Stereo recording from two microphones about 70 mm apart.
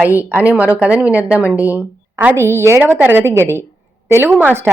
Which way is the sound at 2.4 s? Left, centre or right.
Right.